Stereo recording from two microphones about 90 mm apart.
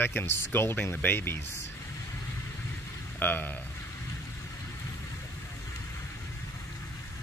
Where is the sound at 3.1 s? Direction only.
20° left (ahead or behind).